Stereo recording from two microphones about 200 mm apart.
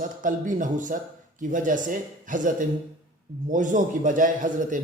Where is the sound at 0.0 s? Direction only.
40° right (ahead or behind).